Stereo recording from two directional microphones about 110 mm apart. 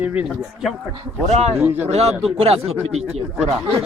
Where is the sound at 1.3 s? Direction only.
70° right (ahead or behind).